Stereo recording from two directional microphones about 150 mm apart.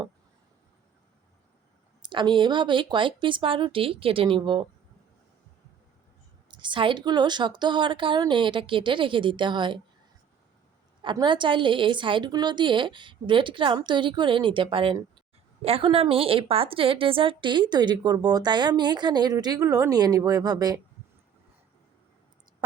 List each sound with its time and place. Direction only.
2.0 s a woman's voice: 30° right (ahead or behind)
6.5 s a woman's voice: 30° right (ahead or behind)
11.0 s a woman's voice: 30° right (ahead or behind)